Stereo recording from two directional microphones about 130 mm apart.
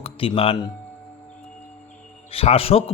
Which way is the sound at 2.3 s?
50° left (ahead or behind).